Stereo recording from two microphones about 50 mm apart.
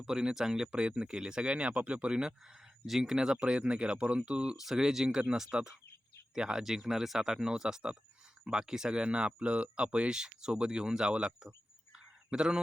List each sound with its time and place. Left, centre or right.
0.0 s speech: centre
4.5 s speech: centre
12.3 s speech: centre